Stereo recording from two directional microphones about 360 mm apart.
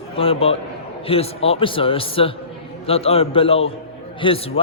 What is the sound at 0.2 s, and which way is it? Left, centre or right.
A man's voice, centre.